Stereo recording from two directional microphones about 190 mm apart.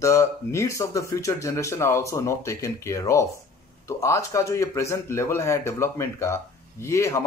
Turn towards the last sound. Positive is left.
turn(degrees=15)  # may be behind; listen again after turning